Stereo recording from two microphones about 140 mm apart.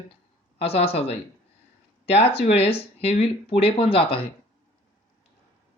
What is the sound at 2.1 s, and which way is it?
Speech, 45° left (ahead or behind).